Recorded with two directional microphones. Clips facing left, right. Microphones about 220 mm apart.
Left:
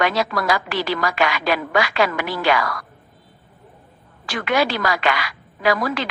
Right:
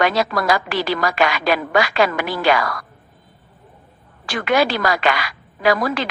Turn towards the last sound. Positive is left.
turn(degrees=-40)  # may be behind; listen again after turning